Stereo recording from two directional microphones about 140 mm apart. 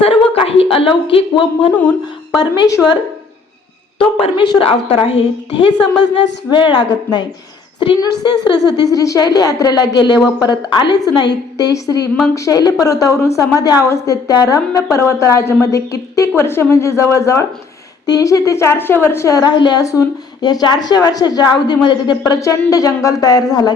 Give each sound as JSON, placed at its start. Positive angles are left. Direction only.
{"t": 0.0, "sound": "a sound", "side_deg": 40}
{"t": 1.0, "sound": "a woman's voice", "side_deg": 40}
{"t": 2.4, "sound": "a woman's voice", "side_deg": 25}
{"t": 3.9, "sound": "a woman's voice", "side_deg": 40}